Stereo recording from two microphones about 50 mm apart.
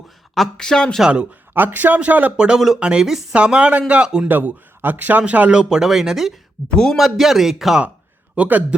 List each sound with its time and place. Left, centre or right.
0.3 s speech: centre
1.0 s a man's voice: centre
1.3 s a man's voice: right
2.6 s a man's voice: centre
2.8 s a man's voice: centre
4.3 s a man's voice: right
5.5 s a man's voice: centre
8.4 s a man's voice: right